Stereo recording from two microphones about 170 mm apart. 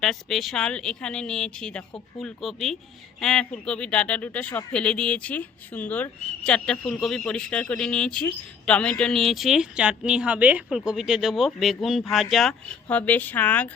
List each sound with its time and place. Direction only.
0.0 s a woman's voice: centre (ahead or behind)